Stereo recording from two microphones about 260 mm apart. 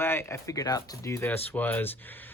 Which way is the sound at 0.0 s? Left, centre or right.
Centre.